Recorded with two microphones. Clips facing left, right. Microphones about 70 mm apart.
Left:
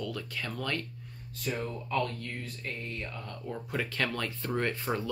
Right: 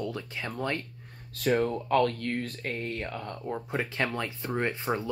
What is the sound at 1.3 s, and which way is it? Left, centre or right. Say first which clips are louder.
Speech: right 9 dB; right.